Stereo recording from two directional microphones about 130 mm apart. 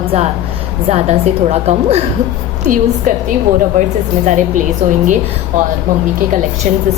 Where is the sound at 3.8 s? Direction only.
70° right (ahead or behind).